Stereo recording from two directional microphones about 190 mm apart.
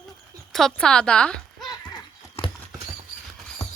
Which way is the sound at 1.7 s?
20° left (ahead or behind).